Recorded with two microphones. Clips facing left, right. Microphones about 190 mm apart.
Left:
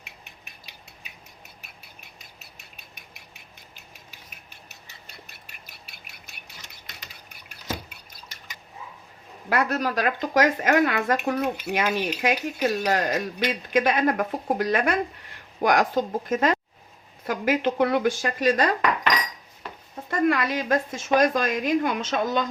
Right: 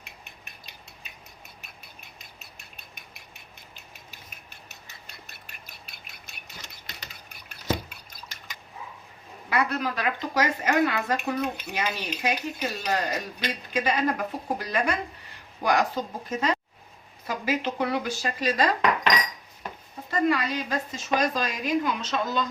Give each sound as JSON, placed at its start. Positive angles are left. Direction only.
{"t": 9.5, "sound": "speech", "side_deg": 45}
{"t": 20.1, "sound": "speech", "side_deg": 50}